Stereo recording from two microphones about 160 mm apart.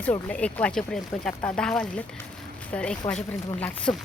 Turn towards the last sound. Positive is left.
turn(degrees=5)  # may be behind; listen again after turning